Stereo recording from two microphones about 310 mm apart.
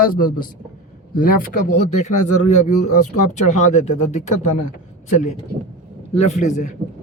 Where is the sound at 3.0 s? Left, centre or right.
Left.